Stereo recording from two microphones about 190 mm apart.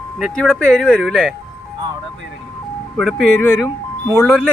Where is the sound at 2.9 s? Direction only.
Centre (ahead or behind).